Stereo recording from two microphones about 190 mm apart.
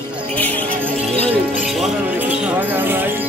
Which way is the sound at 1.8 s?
10° right (ahead or behind).